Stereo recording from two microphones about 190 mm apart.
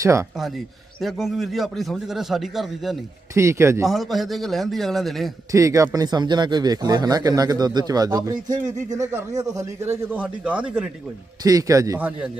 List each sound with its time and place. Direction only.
0.0 s a man's voice: 15° right (ahead or behind)
1.0 s speech: centre (ahead or behind)
3.3 s a man's voice: 15° right (ahead or behind)
3.8 s speech: centre (ahead or behind)
5.5 s a man's voice: 15° right (ahead or behind)
11.4 s a man's voice: 20° right (ahead or behind)